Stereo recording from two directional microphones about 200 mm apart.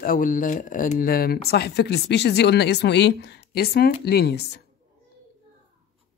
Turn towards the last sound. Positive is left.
turn(degrees=55)  # may be behind; listen again after turning